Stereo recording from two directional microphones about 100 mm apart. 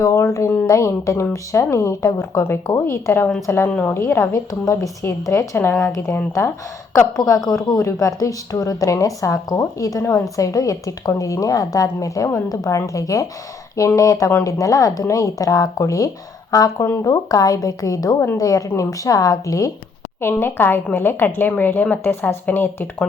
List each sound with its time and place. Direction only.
0.0 s a woman's voice: 35° left (ahead or behind)
7.2 s a woman's voice: 35° left (ahead or behind)
20.2 s a woman's voice: 20° left (ahead or behind)